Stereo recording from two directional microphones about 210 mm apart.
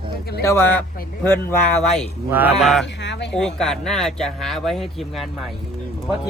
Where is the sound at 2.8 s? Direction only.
55° left (ahead or behind).